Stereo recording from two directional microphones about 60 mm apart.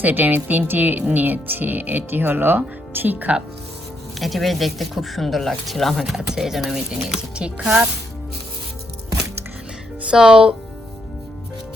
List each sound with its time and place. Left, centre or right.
0.0 s speech: right
4.2 s speech: centre
10.1 s speech: centre